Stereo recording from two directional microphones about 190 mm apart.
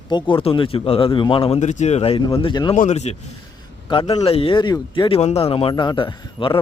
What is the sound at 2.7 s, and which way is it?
Speech, 35° left (ahead or behind).